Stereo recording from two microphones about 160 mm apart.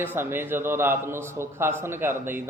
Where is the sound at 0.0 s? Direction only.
15° right (ahead or behind).